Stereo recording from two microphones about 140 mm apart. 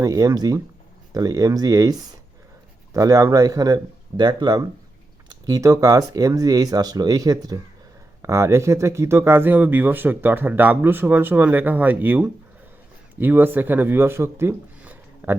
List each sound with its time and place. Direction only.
0.0 s speech: 25° right (ahead or behind)